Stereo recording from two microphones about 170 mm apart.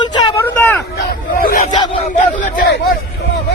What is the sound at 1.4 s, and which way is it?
Hubbub, 55° left (ahead or behind).